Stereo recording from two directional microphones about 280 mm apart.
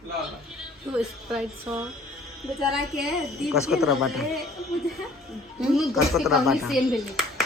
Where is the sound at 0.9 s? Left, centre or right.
Centre.